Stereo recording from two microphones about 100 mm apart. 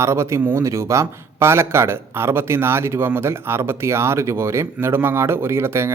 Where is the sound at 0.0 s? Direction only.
30° right (ahead or behind).